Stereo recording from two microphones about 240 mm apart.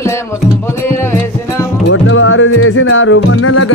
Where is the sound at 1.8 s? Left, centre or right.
Left.